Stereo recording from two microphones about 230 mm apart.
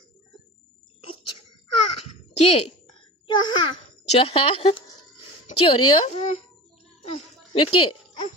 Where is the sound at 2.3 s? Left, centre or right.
Left.